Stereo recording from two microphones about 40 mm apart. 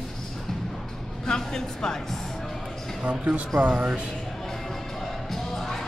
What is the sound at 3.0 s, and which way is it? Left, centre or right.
Speech, right.